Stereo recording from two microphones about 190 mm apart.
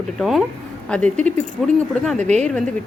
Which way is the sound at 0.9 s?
5° left (ahead or behind).